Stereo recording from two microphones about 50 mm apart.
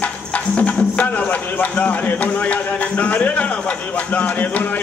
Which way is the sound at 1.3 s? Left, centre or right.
Left.